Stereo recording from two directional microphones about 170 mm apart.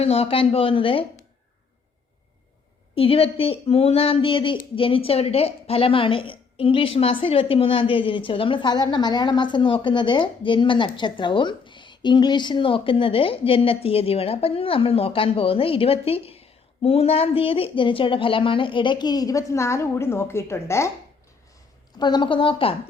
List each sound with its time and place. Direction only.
0.0 s speech: 35° left (ahead or behind)
2.9 s speech: 35° left (ahead or behind); by 20.9 s 15° left (ahead or behind)
21.9 s a woman's voice: 25° left (ahead or behind)